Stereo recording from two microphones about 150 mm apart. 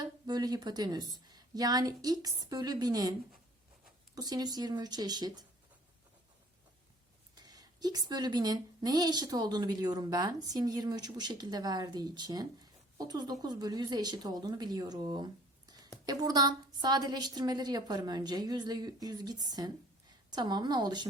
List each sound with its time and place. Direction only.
0.0 s a woman's voice: 25° right (ahead or behind)
7.3 s a woman's voice: 25° right (ahead or behind)